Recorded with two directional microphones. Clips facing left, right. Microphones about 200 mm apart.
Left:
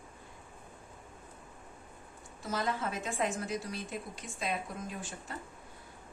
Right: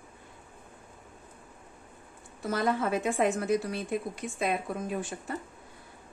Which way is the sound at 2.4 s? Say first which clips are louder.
Right 6 dB; 60° right (ahead or behind).